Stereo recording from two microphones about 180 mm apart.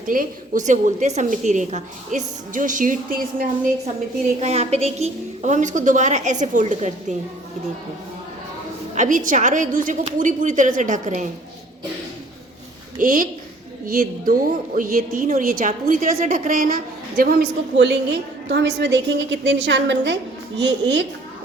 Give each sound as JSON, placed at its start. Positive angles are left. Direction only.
{"t": 0.1, "sound": "a woman's voice", "side_deg": -45}
{"t": 4.4, "sound": "a woman's voice", "side_deg": -35}
{"t": 9.0, "sound": "a woman's voice", "side_deg": -45}
{"t": 13.0, "sound": "a woman's voice", "side_deg": -45}